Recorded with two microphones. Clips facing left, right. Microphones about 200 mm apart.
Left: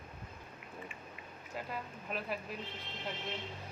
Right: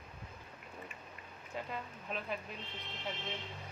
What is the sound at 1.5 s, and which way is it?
Speech, 5° left (ahead or behind).